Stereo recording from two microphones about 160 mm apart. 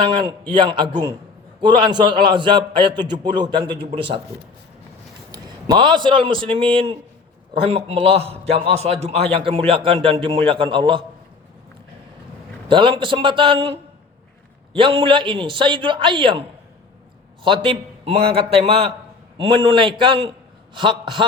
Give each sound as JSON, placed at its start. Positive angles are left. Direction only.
{"t": 0.0, "sound": "a man's voice", "side_deg": -30}
{"t": 5.3, "sound": "a man's voice", "side_deg": -30}
{"t": 12.6, "sound": "a man's voice", "side_deg": -30}
{"t": 17.4, "sound": "a man's voice", "side_deg": -35}